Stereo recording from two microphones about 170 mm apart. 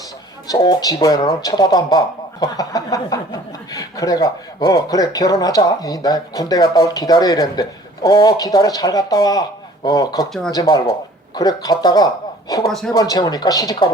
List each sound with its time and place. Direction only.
0.4 s speech: 25° left (ahead or behind)
10.2 s speech: centre (ahead or behind)
10.5 s speech: 25° left (ahead or behind)